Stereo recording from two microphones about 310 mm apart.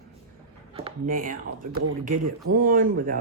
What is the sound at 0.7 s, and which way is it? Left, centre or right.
Speech, right.